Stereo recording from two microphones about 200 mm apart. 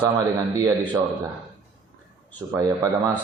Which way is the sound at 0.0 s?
15° right (ahead or behind).